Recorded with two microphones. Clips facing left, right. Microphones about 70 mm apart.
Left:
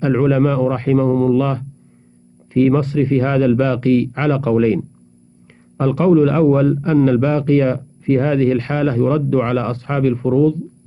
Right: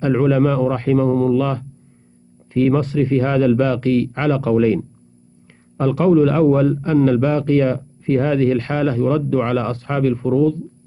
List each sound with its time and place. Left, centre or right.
0.0 s a man's voice: left